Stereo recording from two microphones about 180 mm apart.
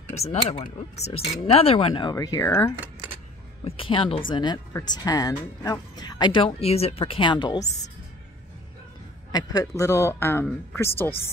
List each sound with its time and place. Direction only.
0.1 s a woman's voice: 35° left (ahead or behind); by 2.7 s 15° left (ahead or behind)
3.6 s a woman's voice: 30° left (ahead or behind)
7.6 s a woman's voice: 40° left (ahead or behind)
9.3 s speech: 20° left (ahead or behind)